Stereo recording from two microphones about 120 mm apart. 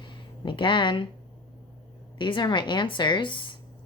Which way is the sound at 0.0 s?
40° left (ahead or behind).